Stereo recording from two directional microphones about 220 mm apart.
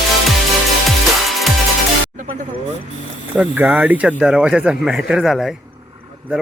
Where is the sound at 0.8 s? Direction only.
Centre (ahead or behind).